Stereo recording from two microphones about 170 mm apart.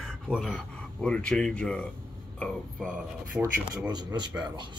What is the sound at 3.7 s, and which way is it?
Speech, 25° right (ahead or behind).